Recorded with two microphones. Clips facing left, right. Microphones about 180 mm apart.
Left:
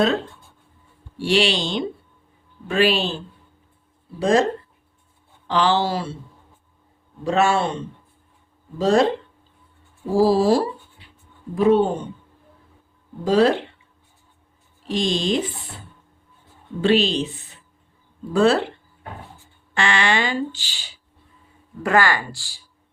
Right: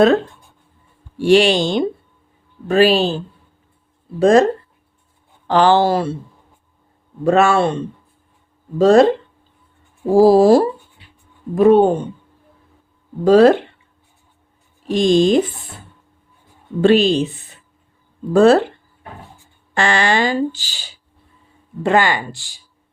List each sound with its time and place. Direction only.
1.2 s speech: 50° right (ahead or behind)
4.2 s speech: 50° right (ahead or behind)
5.5 s speech: 50° right (ahead or behind)
7.3 s speech: 55° right (ahead or behind)
8.8 s speech: 50° right (ahead or behind)
10.1 s speech: 50° right (ahead or behind)
13.2 s speech: 50° right (ahead or behind)
14.8 s speech: 50° right (ahead or behind)
16.8 s speech: 50° right (ahead or behind)
18.3 s speech: 45° right (ahead or behind)
19.7 s speech: 40° right (ahead or behind)
21.8 s speech: 20° right (ahead or behind)